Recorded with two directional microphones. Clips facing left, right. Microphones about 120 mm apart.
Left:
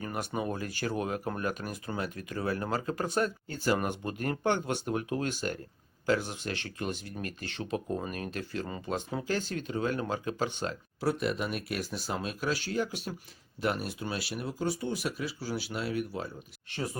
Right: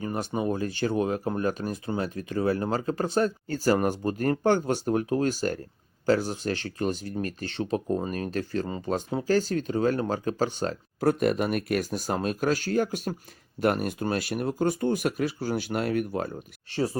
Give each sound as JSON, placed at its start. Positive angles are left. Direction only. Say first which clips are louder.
{"t": 0.0, "sound": "a sound", "louder": "right 5 dB", "side_deg": -30}
{"t": 0.3, "sound": "speech", "louder": "right 7 dB", "side_deg": -30}
{"t": 16.6, "sound": "speech", "louder": "right 8 dB", "side_deg": -35}